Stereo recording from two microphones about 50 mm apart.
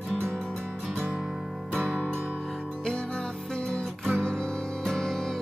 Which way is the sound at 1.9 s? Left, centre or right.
Centre.